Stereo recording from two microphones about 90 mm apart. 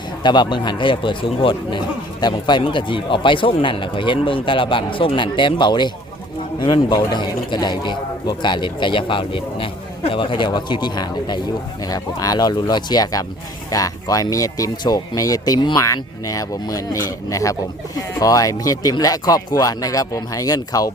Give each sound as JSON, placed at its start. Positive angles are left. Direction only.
{"t": 0.2, "sound": "a man's voice", "side_deg": 55}
{"t": 2.3, "sound": "a man's voice", "side_deg": 65}